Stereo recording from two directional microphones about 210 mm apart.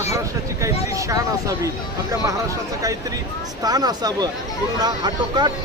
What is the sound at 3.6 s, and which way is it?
Speech, 20° right (ahead or behind).